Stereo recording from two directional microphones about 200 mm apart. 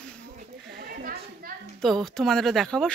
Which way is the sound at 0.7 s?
50° right (ahead or behind).